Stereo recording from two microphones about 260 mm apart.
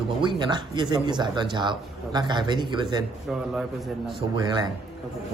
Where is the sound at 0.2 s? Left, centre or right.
Centre.